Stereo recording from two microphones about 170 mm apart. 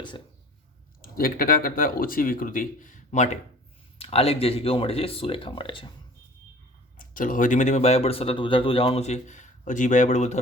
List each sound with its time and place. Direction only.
1.0 s speech: 60° left (ahead or behind); by 5.9 s 30° left (ahead or behind)
7.0 s speech: 50° left (ahead or behind)